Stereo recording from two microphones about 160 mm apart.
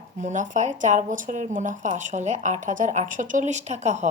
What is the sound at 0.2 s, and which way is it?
A woman's voice, 50° right (ahead or behind).